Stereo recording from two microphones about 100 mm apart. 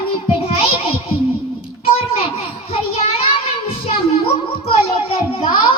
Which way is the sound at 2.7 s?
75° left (ahead or behind).